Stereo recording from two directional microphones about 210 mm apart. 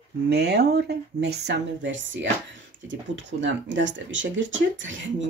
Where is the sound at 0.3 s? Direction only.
50° right (ahead or behind).